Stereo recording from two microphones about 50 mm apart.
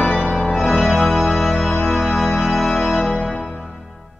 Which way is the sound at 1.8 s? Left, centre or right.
Centre.